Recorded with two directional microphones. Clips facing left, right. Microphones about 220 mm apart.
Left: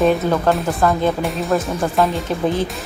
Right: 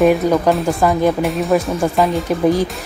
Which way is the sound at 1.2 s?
Centre (ahead or behind).